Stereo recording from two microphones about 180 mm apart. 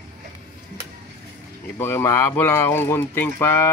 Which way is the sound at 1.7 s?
15° left (ahead or behind).